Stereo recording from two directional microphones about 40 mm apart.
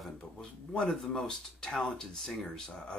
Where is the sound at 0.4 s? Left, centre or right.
Left.